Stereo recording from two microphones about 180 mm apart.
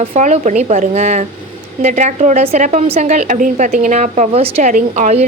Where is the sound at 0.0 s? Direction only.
35° right (ahead or behind).